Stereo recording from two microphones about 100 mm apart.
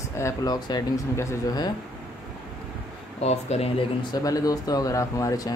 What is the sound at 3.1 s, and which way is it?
Speech, 90° left.